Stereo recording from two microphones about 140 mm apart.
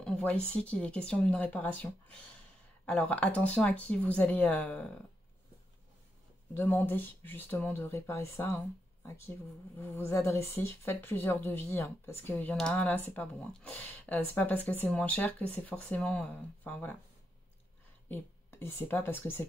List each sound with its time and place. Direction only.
0.0 s a sound: 10° left (ahead or behind)
0.6 s a woman's voice: 5° left (ahead or behind)
6.5 s a woman's voice: 15° left (ahead or behind)
18.0 s speech: 15° left (ahead or behind)